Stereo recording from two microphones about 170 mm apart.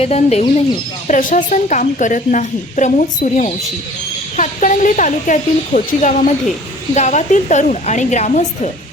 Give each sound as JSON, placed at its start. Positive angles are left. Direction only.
{"t": 0.0, "sound": "speech", "side_deg": 40}
{"t": 1.0, "sound": "a woman's voice", "side_deg": 50}